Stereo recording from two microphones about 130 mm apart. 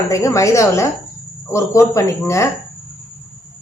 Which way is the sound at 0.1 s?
25° left (ahead or behind).